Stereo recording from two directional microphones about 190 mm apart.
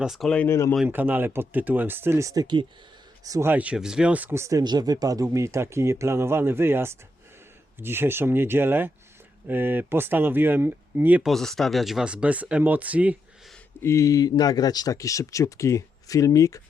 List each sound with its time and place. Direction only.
0.0 s speech: centre (ahead or behind)
0.8 s speech: 10° right (ahead or behind)
13.8 s speech: 15° left (ahead or behind)